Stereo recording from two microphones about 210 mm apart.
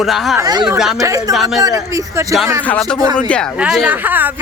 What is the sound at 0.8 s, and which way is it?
Speech, centre (ahead or behind).